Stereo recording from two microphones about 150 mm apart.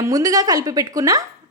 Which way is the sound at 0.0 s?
25° right (ahead or behind).